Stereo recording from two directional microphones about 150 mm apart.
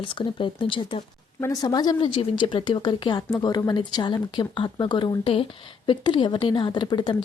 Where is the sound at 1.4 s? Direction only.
25° left (ahead or behind).